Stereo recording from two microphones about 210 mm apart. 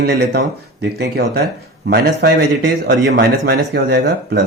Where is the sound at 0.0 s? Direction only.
50° right (ahead or behind).